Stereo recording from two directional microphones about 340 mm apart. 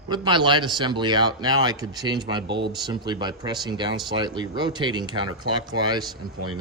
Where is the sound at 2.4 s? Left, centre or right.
Right.